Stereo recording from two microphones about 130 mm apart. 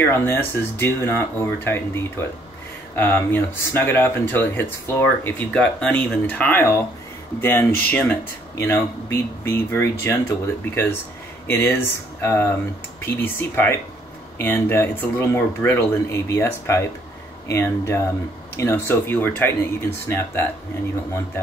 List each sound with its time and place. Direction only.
0.0 s speech: 15° left (ahead or behind)